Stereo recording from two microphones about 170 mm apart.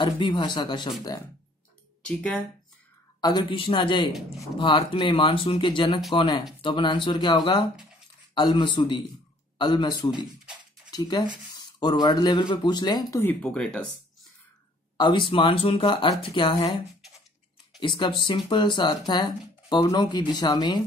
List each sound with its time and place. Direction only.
0.0 s speech: 25° left (ahead or behind)
2.0 s speech: 5° left (ahead or behind)
3.2 s speech: 25° left (ahead or behind)
13.2 s speech: 10° left (ahead or behind)
15.0 s speech: 25° left (ahead or behind)
17.7 s speech: 30° left (ahead or behind)